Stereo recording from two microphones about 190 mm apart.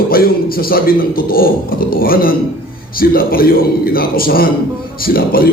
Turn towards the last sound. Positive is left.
turn(degrees=50)  # may be behind; listen again after turning